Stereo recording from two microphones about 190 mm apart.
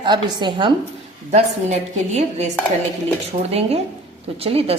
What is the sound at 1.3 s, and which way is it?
A woman's voice, 35° right (ahead or behind).